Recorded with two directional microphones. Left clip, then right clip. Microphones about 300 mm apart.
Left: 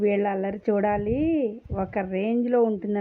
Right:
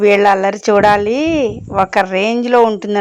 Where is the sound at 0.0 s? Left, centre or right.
Centre.